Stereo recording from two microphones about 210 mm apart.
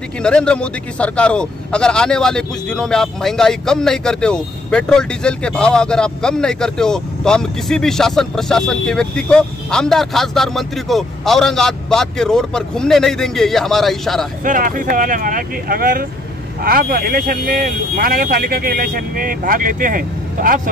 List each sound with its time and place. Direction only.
0.2 s speech: 5° left (ahead or behind)
14.4 s speech: 40° right (ahead or behind)